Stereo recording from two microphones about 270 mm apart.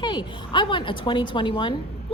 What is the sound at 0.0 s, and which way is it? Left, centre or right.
A woman's voice, centre.